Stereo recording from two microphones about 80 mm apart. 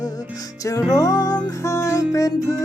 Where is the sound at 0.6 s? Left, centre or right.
Left.